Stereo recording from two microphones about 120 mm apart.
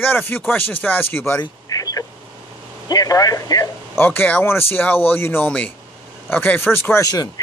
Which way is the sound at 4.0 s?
15° left (ahead or behind).